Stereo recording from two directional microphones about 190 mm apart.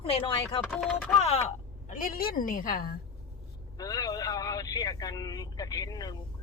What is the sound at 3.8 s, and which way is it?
Speech, 20° left (ahead or behind).